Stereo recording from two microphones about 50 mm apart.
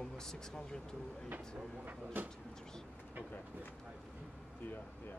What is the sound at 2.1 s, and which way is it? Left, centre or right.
Speech, right.